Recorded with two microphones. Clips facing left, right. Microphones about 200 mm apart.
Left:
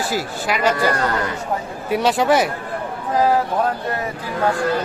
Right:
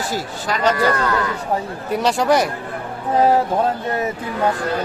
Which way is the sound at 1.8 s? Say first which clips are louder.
Left 1 dB; centre (ahead or behind).